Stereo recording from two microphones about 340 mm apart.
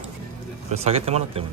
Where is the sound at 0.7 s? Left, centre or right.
Centre.